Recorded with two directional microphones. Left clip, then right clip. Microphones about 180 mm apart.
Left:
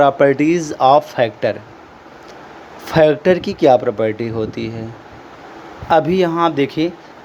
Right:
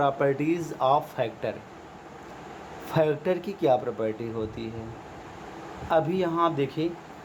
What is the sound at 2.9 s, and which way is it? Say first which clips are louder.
Speech: left 13 dB; 35° left (ahead or behind).